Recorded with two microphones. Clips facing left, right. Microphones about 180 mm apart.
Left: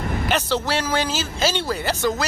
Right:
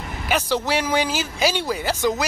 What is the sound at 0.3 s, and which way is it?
Speech, 10° right (ahead or behind).